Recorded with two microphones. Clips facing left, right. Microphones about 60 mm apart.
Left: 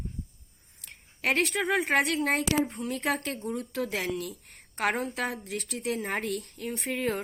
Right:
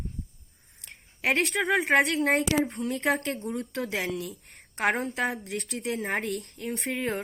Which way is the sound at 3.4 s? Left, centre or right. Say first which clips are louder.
Left 2 dB; right.